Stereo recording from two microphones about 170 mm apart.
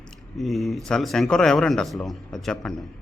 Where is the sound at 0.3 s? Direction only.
Centre (ahead or behind).